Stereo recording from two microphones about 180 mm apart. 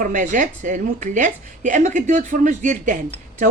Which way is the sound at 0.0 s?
45° right (ahead or behind).